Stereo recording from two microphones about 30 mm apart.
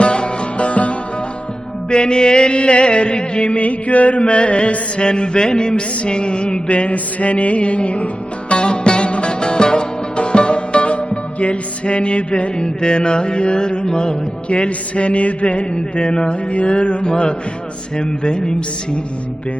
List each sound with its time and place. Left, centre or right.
0.0 s music: left
1.9 s mantra: left
3.6 s music: left
4.2 s mantra: left
6.7 s music: left
8.5 s music: left
12.5 s mantra: left
15.7 s mantra: left
16.5 s mantra: left
17.9 s speech: left